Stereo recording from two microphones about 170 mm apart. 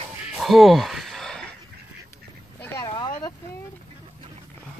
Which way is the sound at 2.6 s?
15° left (ahead or behind).